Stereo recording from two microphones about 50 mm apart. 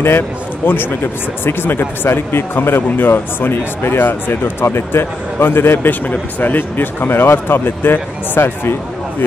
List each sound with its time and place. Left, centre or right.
0.6 s speech: left